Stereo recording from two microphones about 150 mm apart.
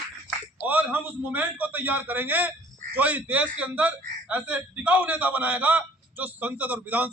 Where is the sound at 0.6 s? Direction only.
10° right (ahead or behind).